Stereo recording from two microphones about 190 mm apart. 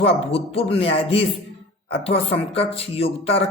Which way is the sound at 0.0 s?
30° left (ahead or behind).